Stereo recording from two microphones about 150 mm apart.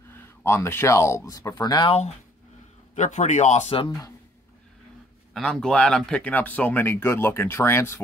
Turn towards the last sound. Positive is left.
turn(degrees=15)  # may be behind; listen again after turning